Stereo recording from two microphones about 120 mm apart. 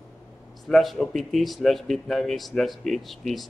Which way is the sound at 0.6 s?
Centre (ahead or behind).